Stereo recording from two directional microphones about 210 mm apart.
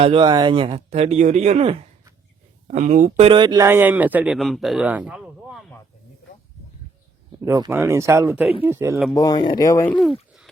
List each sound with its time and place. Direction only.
0.0 s a man's voice: 25° right (ahead or behind); by 5.7 s centre (ahead or behind)
7.4 s a man's voice: 15° right (ahead or behind)
9.1 s speech: 15° left (ahead or behind)
10.0 s a sound: centre (ahead or behind)